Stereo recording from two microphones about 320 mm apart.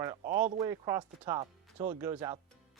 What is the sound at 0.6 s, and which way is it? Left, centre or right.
Speech, centre.